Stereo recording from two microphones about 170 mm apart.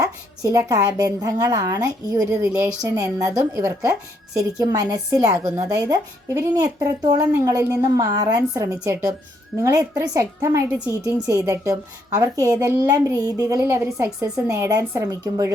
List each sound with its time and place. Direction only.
0.0 s a woman's voice: 20° right (ahead or behind)